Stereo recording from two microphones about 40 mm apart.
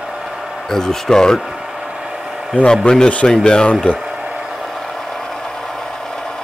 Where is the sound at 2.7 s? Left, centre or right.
Centre.